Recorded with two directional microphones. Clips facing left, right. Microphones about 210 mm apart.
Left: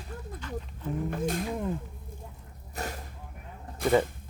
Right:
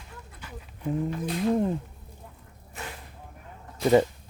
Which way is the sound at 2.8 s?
40° left (ahead or behind).